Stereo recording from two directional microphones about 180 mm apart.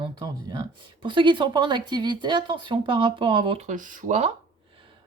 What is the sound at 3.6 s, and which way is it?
Speech, 45° right (ahead or behind).